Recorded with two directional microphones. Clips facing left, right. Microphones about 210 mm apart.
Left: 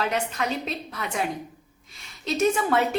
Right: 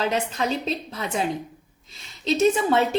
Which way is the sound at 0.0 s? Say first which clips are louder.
Right 2 dB; 30° right (ahead or behind).